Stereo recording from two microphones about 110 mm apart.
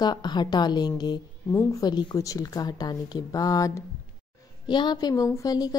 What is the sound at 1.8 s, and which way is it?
A woman's voice, 40° left (ahead or behind).